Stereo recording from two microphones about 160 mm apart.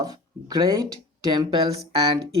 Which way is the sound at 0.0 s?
25° right (ahead or behind).